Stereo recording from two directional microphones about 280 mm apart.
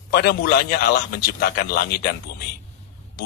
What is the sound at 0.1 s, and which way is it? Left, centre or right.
A man's voice, left.